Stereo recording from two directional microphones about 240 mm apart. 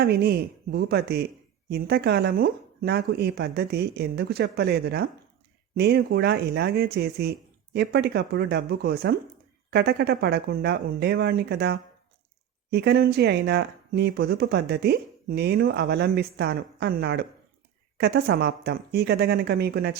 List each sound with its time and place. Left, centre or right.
0.0 s speech: right